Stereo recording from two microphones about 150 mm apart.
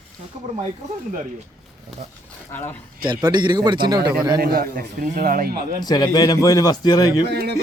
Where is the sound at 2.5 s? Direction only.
15° left (ahead or behind).